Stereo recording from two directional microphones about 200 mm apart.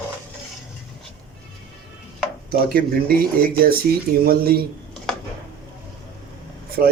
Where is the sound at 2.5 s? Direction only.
50° right (ahead or behind).